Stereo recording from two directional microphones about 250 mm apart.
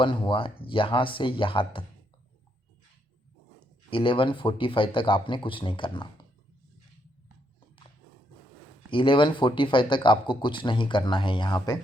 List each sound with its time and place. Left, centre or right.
0.0 s speech: centre
3.8 s speech: left
8.9 s speech: centre